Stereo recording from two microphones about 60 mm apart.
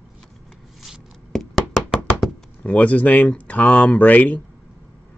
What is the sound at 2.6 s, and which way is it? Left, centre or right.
Speech, left.